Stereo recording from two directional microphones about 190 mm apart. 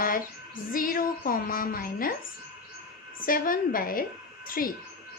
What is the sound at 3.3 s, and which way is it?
Speech, 50° left (ahead or behind).